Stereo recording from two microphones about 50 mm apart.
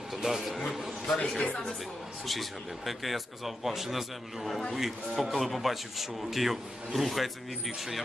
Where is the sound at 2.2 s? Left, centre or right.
Centre.